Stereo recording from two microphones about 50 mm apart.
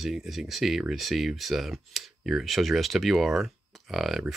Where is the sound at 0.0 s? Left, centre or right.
Centre.